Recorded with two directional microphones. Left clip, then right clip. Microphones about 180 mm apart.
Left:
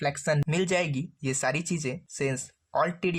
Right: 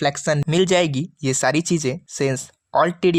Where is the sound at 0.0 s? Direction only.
30° right (ahead or behind).